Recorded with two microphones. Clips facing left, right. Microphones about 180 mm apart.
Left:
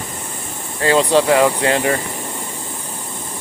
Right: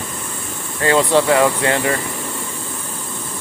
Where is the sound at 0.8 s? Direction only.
20° left (ahead or behind).